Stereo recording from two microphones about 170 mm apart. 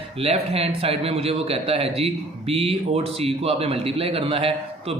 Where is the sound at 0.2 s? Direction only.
35° right (ahead or behind).